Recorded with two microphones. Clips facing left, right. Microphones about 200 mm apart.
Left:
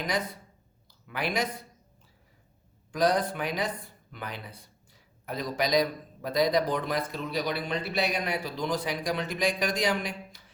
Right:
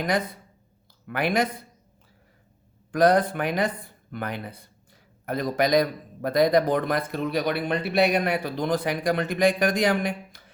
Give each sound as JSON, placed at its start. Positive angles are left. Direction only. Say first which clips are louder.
{"t": 1.0, "sound": "speech", "louder": "right 6 dB", "side_deg": -55}
{"t": 2.9, "sound": "speech", "louder": "right 6 dB", "side_deg": -55}